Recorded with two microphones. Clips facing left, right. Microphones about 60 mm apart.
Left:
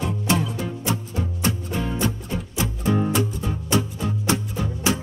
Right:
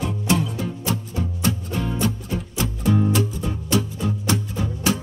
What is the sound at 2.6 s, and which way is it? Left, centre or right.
Music, left.